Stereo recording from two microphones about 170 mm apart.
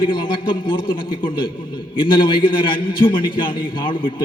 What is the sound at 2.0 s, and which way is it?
A man's voice, 30° left (ahead or behind).